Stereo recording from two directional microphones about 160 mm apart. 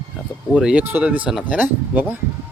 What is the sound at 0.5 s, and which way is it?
Speech, 5° right (ahead or behind).